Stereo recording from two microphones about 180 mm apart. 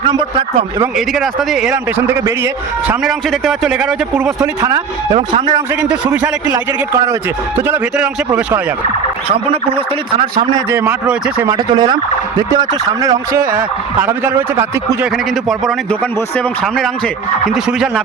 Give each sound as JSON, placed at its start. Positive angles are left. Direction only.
{"t": 0.0, "sound": "a man's voice", "side_deg": -25}
{"t": 0.9, "sound": "a man's voice", "side_deg": 0}
{"t": 1.7, "sound": "a man's voice", "side_deg": -15}
{"t": 5.1, "sound": "a man's voice", "side_deg": -25}
{"t": 9.3, "sound": "speech", "side_deg": -30}
{"t": 10.8, "sound": "a man's voice", "side_deg": -10}
{"t": 11.4, "sound": "speech", "side_deg": -25}
{"t": 13.4, "sound": "a man's voice", "side_deg": -50}
{"t": 14.0, "sound": "a man's voice", "side_deg": -10}
{"t": 15.4, "sound": "a man's voice", "side_deg": 0}
{"t": 17.4, "sound": "a man's voice", "side_deg": 0}